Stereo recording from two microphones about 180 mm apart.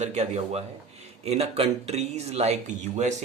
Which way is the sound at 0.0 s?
40° right (ahead or behind).